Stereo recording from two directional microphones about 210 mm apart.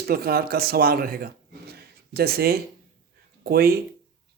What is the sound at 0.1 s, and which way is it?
Speech, 45° right (ahead or behind).